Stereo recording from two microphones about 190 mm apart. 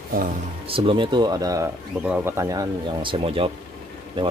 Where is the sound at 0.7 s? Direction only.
30° right (ahead or behind).